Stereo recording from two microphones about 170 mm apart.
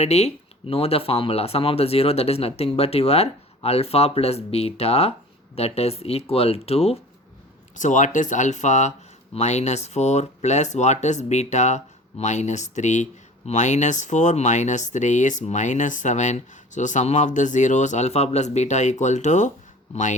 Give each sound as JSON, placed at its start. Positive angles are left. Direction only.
{"t": 0.0, "sound": "speech", "side_deg": 40}
{"t": 7.8, "sound": "speech", "side_deg": 45}